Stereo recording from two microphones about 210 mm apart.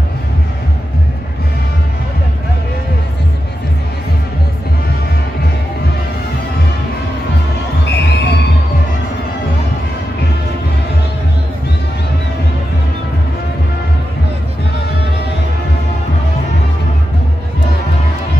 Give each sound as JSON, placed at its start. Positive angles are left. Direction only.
{"t": 7.8, "sound": "music", "side_deg": 55}